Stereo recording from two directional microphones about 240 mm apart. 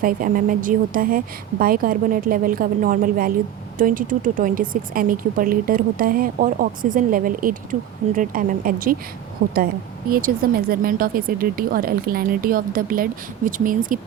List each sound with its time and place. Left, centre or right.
0.0 s speech: right
9.4 s a woman's voice: right
10.1 s speech: right